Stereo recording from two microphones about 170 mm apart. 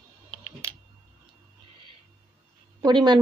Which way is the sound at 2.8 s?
25° right (ahead or behind).